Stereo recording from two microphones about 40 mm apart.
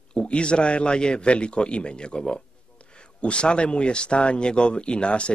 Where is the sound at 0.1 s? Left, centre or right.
Left.